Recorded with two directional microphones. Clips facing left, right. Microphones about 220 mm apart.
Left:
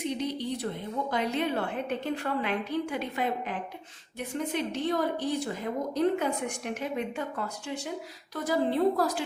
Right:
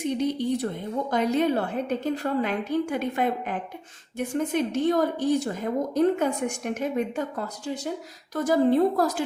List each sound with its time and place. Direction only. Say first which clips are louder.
0.2 s a woman's voice: right 6 dB; 50° right (ahead or behind)